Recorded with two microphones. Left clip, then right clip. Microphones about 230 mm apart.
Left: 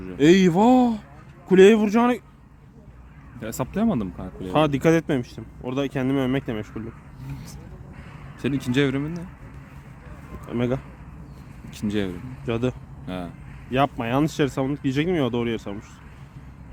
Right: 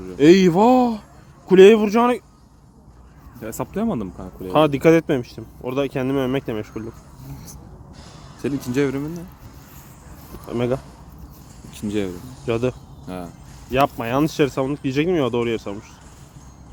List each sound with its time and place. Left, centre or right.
0.2 s speech: centre
3.4 s speech: left
4.4 s speech: centre
8.4 s speech: centre
10.4 s speech: centre
11.9 s speech: centre
12.5 s speech: centre
13.1 s speech: centre
13.7 s speech: centre